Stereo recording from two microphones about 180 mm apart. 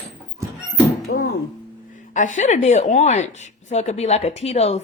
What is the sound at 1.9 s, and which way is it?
A woman's voice, 45° left (ahead or behind).